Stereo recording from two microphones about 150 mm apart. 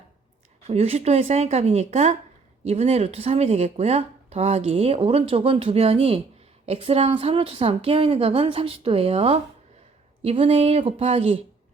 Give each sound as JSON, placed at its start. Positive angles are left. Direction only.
{"t": 0.7, "sound": "a woman's voice", "side_deg": -45}